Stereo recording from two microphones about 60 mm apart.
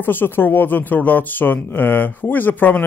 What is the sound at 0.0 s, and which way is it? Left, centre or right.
Speech, left.